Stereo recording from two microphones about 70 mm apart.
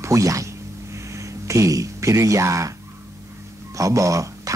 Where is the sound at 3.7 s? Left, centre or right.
Right.